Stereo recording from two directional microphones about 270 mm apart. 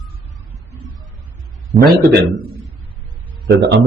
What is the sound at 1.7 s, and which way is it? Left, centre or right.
Speech, right.